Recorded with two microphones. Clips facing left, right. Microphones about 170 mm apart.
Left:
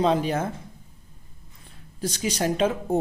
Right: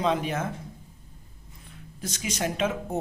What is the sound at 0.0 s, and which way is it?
Speech, 35° left (ahead or behind).